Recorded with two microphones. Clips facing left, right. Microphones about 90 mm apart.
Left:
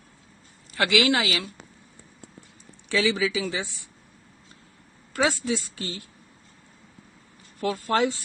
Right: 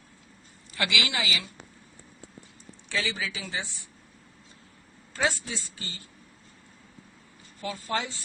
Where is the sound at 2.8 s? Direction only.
90° left.